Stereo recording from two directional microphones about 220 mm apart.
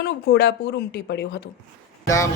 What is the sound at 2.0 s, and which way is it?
Speech, 15° left (ahead or behind).